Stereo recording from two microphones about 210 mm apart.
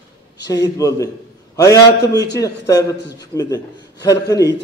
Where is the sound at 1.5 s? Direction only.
15° left (ahead or behind).